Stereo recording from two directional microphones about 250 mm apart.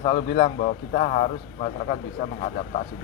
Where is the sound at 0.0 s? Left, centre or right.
Left.